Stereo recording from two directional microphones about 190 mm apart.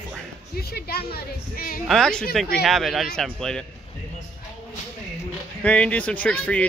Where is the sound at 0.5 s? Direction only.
55° left (ahead or behind).